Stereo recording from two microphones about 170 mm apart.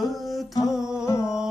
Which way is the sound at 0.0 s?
Centre (ahead or behind).